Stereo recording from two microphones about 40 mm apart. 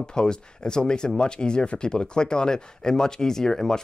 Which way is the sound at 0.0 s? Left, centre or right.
Centre.